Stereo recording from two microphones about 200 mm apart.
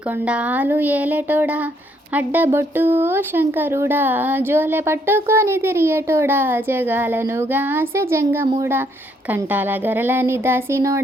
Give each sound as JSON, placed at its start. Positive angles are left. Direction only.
{"t": 0.1, "sound": "speech", "side_deg": -5}